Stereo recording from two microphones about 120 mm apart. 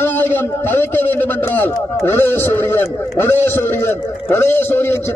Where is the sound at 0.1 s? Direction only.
15° left (ahead or behind).